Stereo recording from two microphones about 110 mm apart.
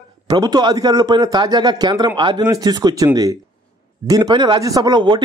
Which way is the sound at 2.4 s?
35° right (ahead or behind).